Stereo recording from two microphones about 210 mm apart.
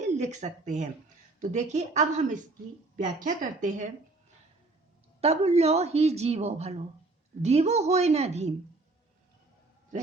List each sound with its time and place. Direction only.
0.0 s a woman's voice: 35° right (ahead or behind)
5.2 s a woman's voice: 30° right (ahead or behind)